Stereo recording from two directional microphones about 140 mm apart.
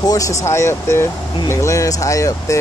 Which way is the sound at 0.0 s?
25° left (ahead or behind).